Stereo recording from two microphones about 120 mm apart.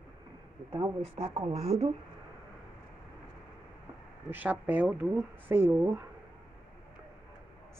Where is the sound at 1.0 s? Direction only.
55° right (ahead or behind).